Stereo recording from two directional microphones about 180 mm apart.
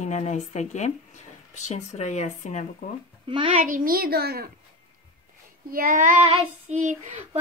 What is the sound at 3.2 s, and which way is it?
Speech, 25° right (ahead or behind).